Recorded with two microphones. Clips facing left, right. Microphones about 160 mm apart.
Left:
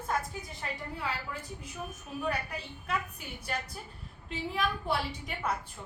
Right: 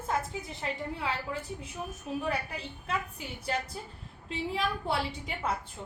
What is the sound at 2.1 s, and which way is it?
Speech, 30° right (ahead or behind).